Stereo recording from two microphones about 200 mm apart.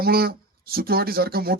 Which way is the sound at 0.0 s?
50° right (ahead or behind).